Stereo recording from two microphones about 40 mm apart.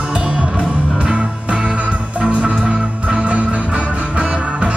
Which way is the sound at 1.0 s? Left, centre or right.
Right.